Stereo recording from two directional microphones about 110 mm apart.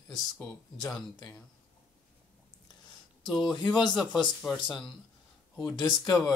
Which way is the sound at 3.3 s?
45° left (ahead or behind).